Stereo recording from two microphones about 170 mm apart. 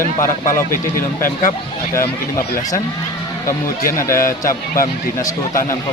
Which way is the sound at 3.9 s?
15° left (ahead or behind).